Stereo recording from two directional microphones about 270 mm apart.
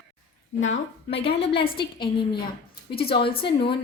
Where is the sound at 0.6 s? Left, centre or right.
Left.